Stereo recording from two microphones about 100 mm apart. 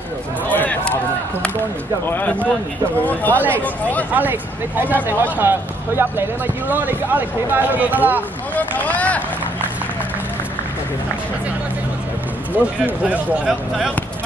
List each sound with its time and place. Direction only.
0.5 s a sound: 15° left (ahead or behind)
2.0 s speech: 15° left (ahead or behind)
4.1 s speech: 20° right (ahead or behind)
8.5 s boat: 15° left (ahead or behind)
12.5 s speech: 15° right (ahead or behind)